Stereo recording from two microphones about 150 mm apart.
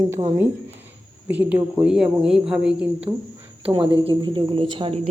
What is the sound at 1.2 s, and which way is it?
Speech, 10° right (ahead or behind).